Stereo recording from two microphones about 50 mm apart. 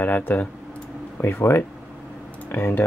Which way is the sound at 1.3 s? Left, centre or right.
Left.